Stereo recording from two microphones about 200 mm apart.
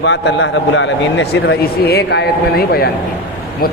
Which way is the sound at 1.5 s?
55° left (ahead or behind).